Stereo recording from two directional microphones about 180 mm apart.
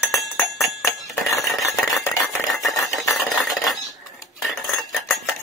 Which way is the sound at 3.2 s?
Centre (ahead or behind).